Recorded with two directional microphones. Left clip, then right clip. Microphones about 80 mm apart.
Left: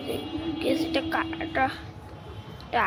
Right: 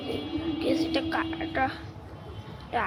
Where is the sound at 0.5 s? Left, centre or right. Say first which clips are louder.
Left 1 dB; centre.